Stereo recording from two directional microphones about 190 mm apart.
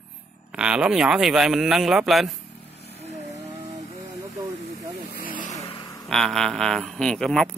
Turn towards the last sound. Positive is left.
turn(degrees=5)  # may be behind; listen again after turning